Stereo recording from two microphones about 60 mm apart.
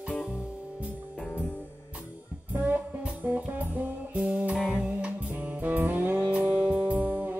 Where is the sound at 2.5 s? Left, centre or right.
Right.